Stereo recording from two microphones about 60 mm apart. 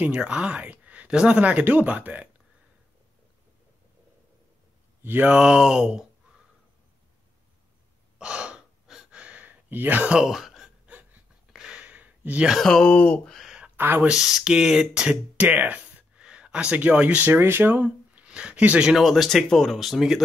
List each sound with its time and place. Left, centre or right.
0.0 s speech: centre
5.0 s speech: right
5.3 s speech: centre
8.2 s gasp: centre
9.2 s a sound: right
10.2 s a sound: centre; by 12.4 s right
12.5 s speech: centre
12.9 s speech: left
13.7 s speech: right
14.2 s speech: centre
15.4 s speech: right
17.4 s speech: right
18.2 s a sound: centre
18.9 s speech: centre